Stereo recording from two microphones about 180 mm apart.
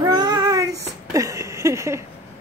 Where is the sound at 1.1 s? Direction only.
15° right (ahead or behind).